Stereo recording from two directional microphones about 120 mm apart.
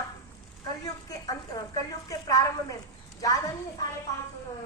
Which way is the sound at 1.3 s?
30° left (ahead or behind).